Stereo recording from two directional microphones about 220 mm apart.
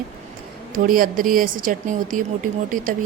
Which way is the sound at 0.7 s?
40° right (ahead or behind).